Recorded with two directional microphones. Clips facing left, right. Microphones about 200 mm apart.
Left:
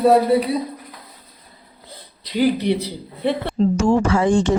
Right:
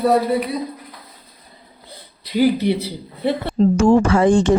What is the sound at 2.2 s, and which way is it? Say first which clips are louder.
A man's voice: right 2 dB; 10° right (ahead or behind).